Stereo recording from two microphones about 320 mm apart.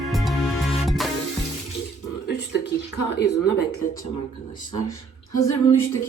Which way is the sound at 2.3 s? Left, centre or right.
Left.